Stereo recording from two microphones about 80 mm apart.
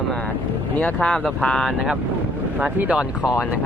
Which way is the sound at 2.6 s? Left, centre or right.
Centre.